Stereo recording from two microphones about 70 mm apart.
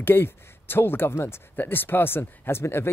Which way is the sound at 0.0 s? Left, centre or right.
Left.